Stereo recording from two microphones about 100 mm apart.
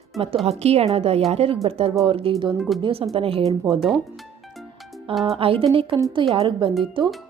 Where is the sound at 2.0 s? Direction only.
70° right (ahead or behind).